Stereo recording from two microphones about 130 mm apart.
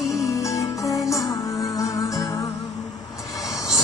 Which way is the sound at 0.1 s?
25° left (ahead or behind).